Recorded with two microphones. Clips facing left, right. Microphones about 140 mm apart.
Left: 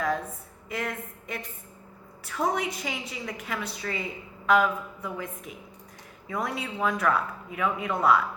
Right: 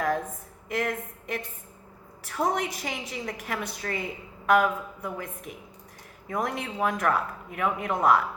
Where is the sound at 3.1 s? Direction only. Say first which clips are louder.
Right 1 dB; 50° right (ahead or behind).